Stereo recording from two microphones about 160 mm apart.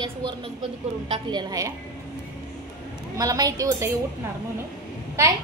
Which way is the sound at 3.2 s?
20° right (ahead or behind).